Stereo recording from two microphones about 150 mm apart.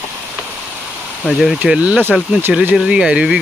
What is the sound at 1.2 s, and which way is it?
Speech, centre (ahead or behind).